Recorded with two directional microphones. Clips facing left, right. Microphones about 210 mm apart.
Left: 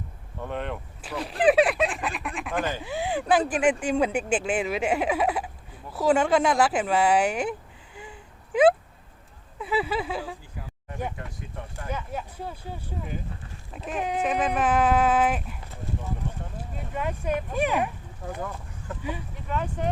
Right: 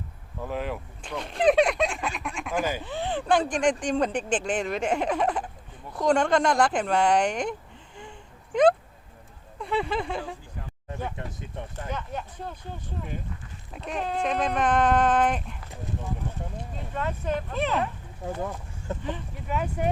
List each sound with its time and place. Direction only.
0.4 s speech: 5° right (ahead or behind)
2.8 s speech: 10° left (ahead or behind)
9.6 s speech: 5° left (ahead or behind)
11.9 s speech: 5° left (ahead or behind)
16.6 s speech: 10° left (ahead or behind)
18.3 s speech: 25° right (ahead or behind)
19.5 s speech: 10° right (ahead or behind)